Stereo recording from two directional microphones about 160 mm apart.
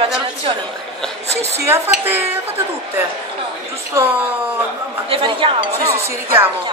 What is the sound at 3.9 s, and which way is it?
Speech, 20° right (ahead or behind).